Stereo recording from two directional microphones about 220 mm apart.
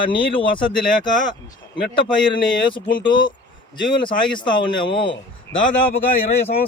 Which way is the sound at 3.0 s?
20° left (ahead or behind).